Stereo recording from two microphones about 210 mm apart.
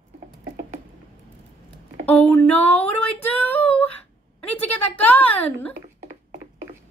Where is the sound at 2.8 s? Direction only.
10° left (ahead or behind).